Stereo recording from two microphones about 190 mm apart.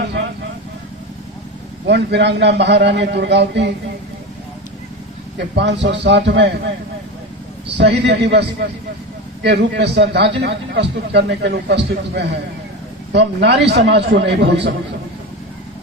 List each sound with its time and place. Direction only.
1.9 s a man's voice: 65° right (ahead or behind)
5.5 s a man's voice: 65° right (ahead or behind)
7.8 s a man's voice: 60° right (ahead or behind)